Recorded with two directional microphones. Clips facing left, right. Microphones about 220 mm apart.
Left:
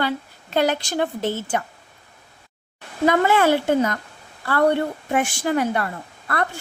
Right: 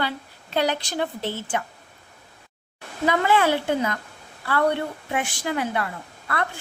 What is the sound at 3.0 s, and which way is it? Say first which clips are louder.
Speech: left 3 dB; 45° left (ahead or behind).